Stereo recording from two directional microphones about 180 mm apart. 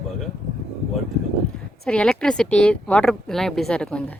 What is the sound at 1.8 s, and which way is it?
Speech, 5° left (ahead or behind).